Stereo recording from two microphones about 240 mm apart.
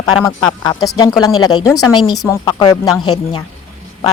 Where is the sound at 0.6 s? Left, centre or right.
Centre.